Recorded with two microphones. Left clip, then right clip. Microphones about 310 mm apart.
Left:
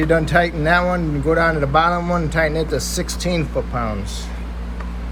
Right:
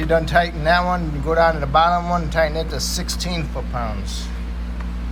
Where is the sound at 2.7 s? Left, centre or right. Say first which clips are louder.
Left 3 dB; right.